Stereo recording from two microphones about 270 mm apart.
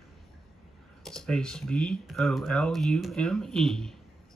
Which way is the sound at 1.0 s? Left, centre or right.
Centre.